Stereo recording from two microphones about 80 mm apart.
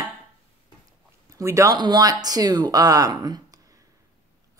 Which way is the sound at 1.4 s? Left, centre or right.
Right.